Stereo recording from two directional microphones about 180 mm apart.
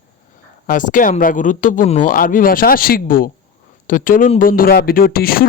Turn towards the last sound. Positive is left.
turn(degrees=55)  # may be behind; listen again after turning